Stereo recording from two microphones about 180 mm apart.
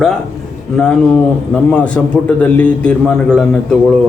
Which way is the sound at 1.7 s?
5° left (ahead or behind).